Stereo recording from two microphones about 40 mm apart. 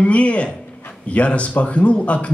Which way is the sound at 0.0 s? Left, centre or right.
Left.